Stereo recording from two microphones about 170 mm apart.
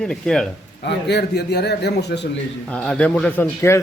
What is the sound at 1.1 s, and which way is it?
A man's voice, 70° left (ahead or behind).